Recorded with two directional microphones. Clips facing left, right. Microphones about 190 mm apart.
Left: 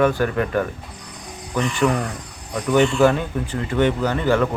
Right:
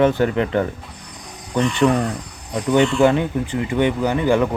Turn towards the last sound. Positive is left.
turn(degrees=-15)  # may be behind; listen again after turning